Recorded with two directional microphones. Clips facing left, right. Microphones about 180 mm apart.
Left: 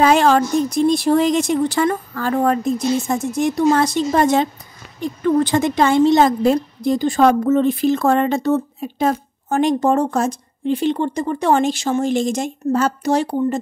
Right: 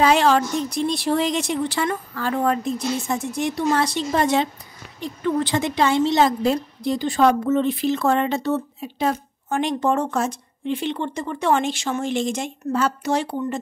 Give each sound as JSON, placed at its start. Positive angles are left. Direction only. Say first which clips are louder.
{"t": 0.0, "sound": "a woman's voice", "louder": "left 3 dB", "side_deg": 50}